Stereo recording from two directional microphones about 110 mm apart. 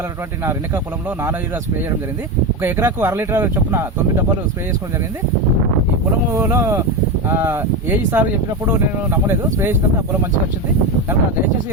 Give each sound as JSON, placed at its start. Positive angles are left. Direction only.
{"t": 2.6, "sound": "speech", "side_deg": -25}
{"t": 6.3, "sound": "speech", "side_deg": -25}